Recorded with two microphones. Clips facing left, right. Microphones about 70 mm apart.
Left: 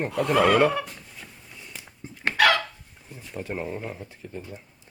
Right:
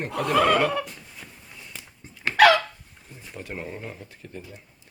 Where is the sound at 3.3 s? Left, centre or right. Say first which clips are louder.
Left 4 dB; left.